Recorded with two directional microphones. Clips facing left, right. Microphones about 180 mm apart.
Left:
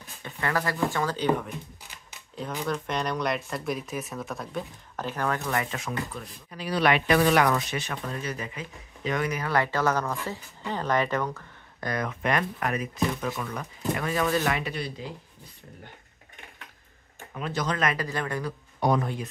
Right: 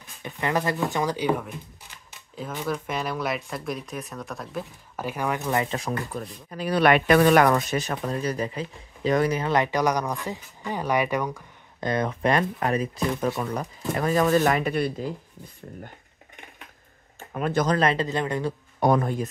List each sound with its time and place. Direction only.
0.2 s speech: 20° right (ahead or behind)
5.7 s speech: 35° right (ahead or behind)
6.5 s speech: 50° right (ahead or behind); by 11.9 s 10° right (ahead or behind)
11.9 s speech: 30° right (ahead or behind); by 15.0 s 50° right (ahead or behind)
17.3 s speech: 50° right (ahead or behind)
17.7 s speech: 25° right (ahead or behind)
18.8 s speech: 50° right (ahead or behind)